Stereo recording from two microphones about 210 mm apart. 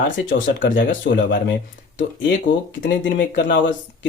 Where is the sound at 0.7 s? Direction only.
55° left (ahead or behind).